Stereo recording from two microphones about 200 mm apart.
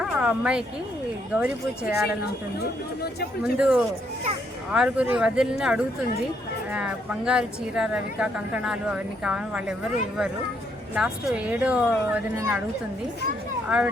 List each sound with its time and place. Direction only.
0.0 s a sound: 5° right (ahead or behind)
1.4 s speech: 10° right (ahead or behind)
2.6 s speech: 50° left (ahead or behind)
3.4 s a woman's voice: 5° right (ahead or behind)
13.7 s a woman's voice: 5° right (ahead or behind)